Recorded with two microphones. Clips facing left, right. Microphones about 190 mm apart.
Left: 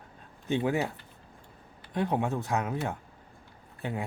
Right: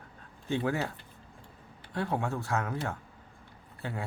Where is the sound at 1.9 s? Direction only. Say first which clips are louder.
Left 3 dB; 20° left (ahead or behind).